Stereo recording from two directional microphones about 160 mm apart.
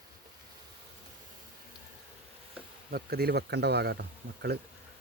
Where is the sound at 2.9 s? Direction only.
75° right (ahead or behind).